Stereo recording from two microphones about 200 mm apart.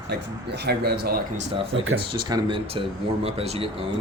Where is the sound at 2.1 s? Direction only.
25° right (ahead or behind).